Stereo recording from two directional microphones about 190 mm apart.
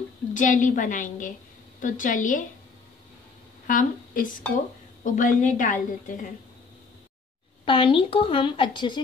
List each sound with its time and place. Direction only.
0.3 s a woman's voice: 40° left (ahead or behind)
3.6 s a woman's voice: 45° left (ahead or behind)
7.6 s a woman's voice: 25° left (ahead or behind)